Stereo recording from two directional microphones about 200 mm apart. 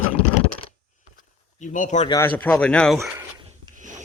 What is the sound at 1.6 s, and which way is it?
Speech, 40° left (ahead or behind).